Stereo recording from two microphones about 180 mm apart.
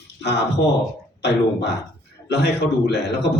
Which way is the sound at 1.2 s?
70° left (ahead or behind).